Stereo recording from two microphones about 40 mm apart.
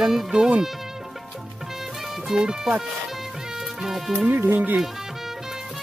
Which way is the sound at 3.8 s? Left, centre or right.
Centre.